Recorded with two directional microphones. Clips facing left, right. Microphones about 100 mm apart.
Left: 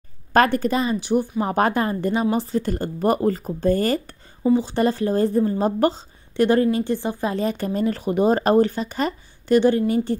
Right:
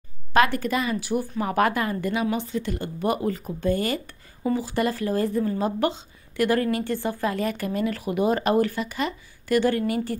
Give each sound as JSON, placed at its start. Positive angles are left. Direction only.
{"t": 0.3, "sound": "speech", "side_deg": 35}
{"t": 4.6, "sound": "a woman's voice", "side_deg": 25}